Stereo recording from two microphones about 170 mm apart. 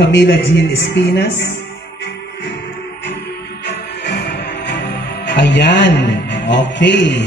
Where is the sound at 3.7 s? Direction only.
85° left.